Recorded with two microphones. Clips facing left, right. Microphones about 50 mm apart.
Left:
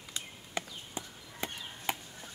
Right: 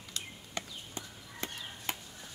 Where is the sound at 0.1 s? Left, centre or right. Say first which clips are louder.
Left 2 dB; centre.